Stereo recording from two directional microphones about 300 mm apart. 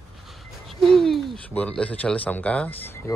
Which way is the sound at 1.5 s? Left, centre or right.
Centre.